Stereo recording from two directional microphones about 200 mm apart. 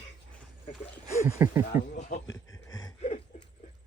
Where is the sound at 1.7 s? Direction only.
40° left (ahead or behind).